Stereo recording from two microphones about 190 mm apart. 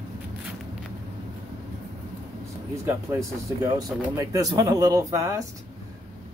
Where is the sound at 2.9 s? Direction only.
15° right (ahead or behind).